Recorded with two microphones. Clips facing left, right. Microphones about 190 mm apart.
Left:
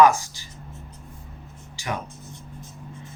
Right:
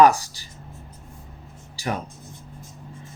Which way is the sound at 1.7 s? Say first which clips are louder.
Right 3 dB; 35° right (ahead or behind).